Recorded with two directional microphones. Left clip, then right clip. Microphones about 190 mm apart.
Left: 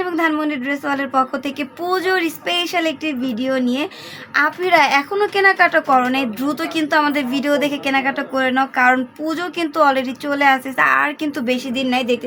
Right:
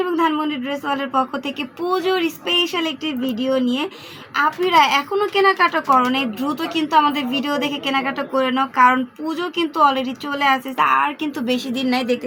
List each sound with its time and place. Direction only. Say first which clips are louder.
0.0 s a woman's voice: even; 40° left (ahead or behind)